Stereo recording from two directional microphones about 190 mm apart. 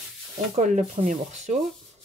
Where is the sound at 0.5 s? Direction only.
35° right (ahead or behind).